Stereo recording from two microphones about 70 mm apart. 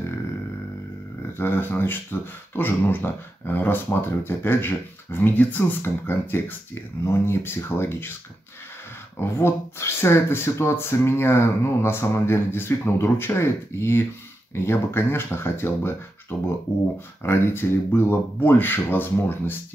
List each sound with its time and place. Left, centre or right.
1.4 s speech: left
9.2 s speech: left